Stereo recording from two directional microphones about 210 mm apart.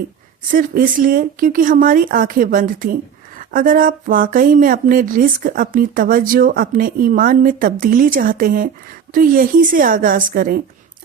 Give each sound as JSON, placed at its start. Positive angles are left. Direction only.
{"t": 0.5, "sound": "speech", "side_deg": -40}